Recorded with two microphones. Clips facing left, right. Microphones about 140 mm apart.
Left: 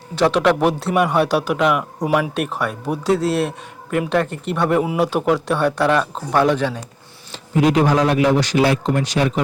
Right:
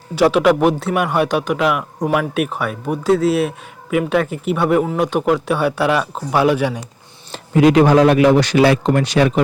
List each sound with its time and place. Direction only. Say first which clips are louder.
0.2 s a man's voice: right 3 dB; 5° right (ahead or behind)
7.5 s a man's voice: right 5 dB; 90° right; by 9.4 s 70° right (ahead or behind)